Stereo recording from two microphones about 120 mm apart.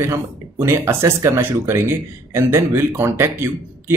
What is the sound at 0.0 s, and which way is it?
Speech, 25° right (ahead or behind).